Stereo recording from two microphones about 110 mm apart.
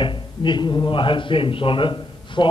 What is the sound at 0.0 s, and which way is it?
Speech, 45° left (ahead or behind).